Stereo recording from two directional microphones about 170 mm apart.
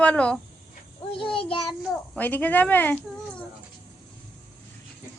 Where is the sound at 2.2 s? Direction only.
10° left (ahead or behind).